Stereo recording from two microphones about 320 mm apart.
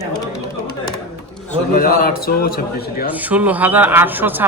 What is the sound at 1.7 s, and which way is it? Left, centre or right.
Speech, left.